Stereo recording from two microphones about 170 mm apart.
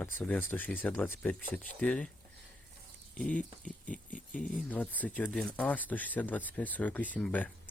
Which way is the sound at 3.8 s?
50° left (ahead or behind).